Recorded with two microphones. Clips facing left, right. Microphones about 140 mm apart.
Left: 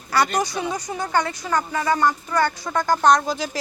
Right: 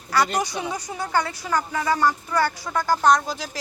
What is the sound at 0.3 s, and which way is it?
Speech, 15° right (ahead or behind).